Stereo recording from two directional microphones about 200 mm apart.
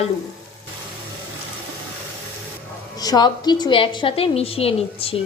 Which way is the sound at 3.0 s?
20° left (ahead or behind).